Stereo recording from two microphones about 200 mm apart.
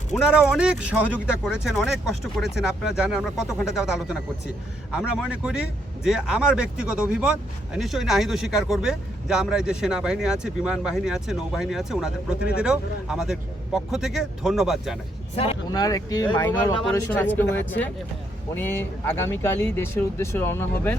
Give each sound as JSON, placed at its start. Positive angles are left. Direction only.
{"t": 0.1, "sound": "speech", "side_deg": -5}
{"t": 15.4, "sound": "speech", "side_deg": 20}